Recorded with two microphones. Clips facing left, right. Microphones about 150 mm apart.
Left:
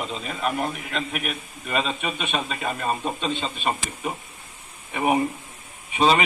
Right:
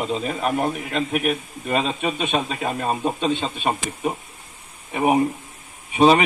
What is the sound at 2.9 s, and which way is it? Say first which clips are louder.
Speech: right 4 dB; 15° right (ahead or behind).